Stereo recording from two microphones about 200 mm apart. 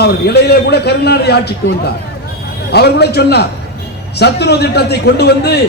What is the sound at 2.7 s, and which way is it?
A man's voice, 55° left (ahead or behind).